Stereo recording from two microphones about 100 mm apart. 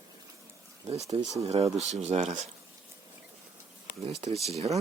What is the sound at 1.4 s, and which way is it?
Speech, 90° right.